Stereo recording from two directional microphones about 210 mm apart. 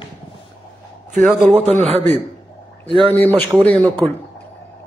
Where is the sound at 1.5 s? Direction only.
35° right (ahead or behind).